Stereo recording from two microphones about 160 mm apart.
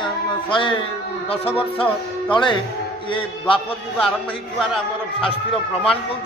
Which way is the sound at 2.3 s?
30° left (ahead or behind).